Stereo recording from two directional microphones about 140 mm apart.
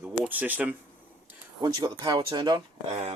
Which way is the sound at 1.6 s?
30° right (ahead or behind).